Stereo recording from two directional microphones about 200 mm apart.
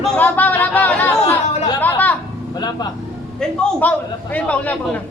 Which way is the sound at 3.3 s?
10° left (ahead or behind).